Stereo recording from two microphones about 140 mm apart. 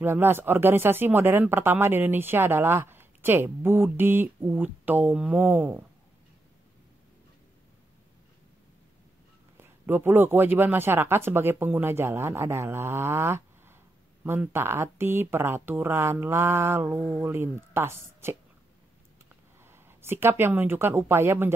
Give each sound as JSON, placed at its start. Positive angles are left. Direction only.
{"t": 0.0, "sound": "speech", "side_deg": -15}
{"t": 9.6, "sound": "speech", "side_deg": -15}
{"t": 19.6, "sound": "speech", "side_deg": -15}